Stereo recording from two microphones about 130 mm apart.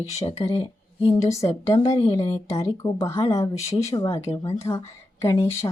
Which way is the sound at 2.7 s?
25° left (ahead or behind).